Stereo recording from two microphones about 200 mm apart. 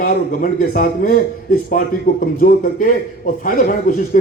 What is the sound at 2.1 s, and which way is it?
A man's voice, 40° left (ahead or behind).